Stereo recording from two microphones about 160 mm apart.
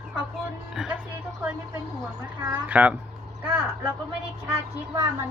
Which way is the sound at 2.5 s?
10° right (ahead or behind).